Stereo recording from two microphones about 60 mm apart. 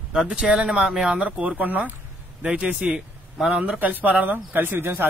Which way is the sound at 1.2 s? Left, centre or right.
Right.